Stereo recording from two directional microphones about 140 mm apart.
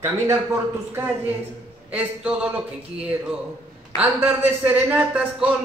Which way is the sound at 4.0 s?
10° right (ahead or behind).